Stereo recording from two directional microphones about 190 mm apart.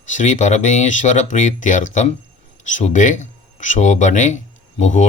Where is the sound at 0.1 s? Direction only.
40° left (ahead or behind).